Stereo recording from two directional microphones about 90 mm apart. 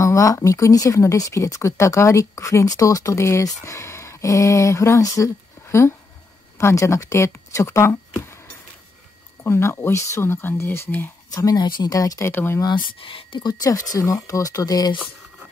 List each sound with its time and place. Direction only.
0.0 s speech: 35° left (ahead or behind)
9.4 s speech: 30° left (ahead or behind)
11.2 s speech: 45° left (ahead or behind)
12.3 s speech: 25° left (ahead or behind)
12.7 s speech: 65° left (ahead or behind)
13.5 s speech: 40° left (ahead or behind)